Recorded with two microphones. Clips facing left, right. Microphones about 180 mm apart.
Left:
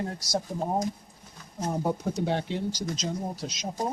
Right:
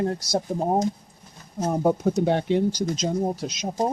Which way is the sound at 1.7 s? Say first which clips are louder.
Right 7 dB; 55° right (ahead or behind).